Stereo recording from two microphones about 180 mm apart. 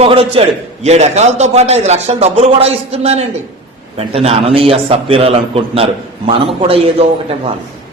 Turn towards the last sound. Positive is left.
turn(degrees=-35)  # may be behind; listen again after turning